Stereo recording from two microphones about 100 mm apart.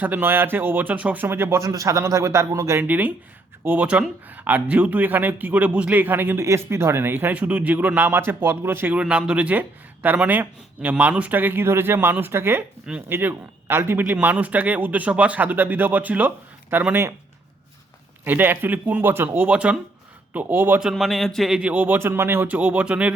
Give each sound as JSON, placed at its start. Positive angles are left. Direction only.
{"t": 0.0, "sound": "a man's voice", "side_deg": -20}
{"t": 2.8, "sound": "a man's voice", "side_deg": -15}
{"t": 9.0, "sound": "a man's voice", "side_deg": -10}
{"t": 18.3, "sound": "speech", "side_deg": -20}
{"t": 20.8, "sound": "speech", "side_deg": 0}